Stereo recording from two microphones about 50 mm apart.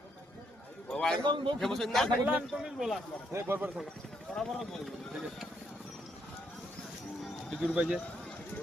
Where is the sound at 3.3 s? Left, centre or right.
Right.